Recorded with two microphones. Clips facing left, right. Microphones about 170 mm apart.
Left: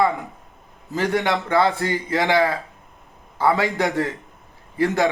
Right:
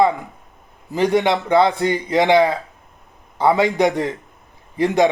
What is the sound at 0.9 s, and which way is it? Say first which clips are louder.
A man's voice: right 5 dB; 15° right (ahead or behind).